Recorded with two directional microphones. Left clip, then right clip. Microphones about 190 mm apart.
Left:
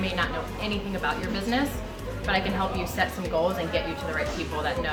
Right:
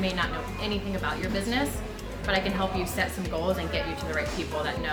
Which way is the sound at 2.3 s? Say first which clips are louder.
Left 1 dB; 10° right (ahead or behind).